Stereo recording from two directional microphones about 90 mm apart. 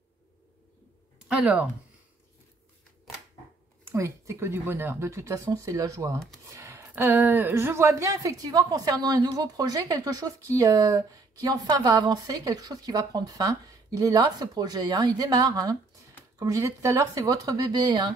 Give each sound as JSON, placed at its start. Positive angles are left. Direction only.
{"t": 1.3, "sound": "speech", "side_deg": -15}
{"t": 3.9, "sound": "speech", "side_deg": -35}